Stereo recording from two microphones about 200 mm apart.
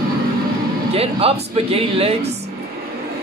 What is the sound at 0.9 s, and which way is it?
Speech, 30° right (ahead or behind).